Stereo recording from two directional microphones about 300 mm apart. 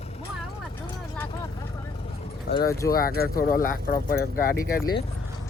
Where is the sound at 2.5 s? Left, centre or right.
Left.